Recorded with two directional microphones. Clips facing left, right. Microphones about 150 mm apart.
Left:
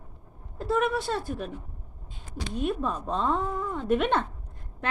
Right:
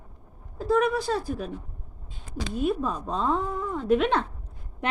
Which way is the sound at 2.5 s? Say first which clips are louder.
Right 2 dB; centre (ahead or behind).